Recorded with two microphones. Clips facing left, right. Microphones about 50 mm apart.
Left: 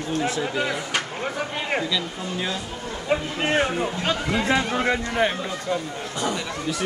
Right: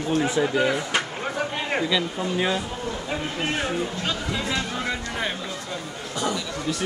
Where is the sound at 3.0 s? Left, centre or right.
Left.